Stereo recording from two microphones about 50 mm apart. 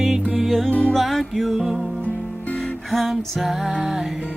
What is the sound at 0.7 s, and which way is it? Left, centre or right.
Music, left.